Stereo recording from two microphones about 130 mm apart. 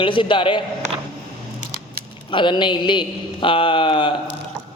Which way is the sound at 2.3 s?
40° left (ahead or behind).